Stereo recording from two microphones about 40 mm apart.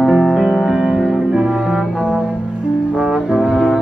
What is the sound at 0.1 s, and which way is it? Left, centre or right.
Music, centre.